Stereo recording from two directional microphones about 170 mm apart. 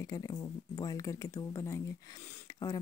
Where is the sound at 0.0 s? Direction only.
20° left (ahead or behind).